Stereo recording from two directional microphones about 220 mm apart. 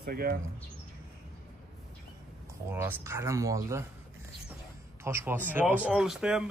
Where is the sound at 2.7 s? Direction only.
10° right (ahead or behind).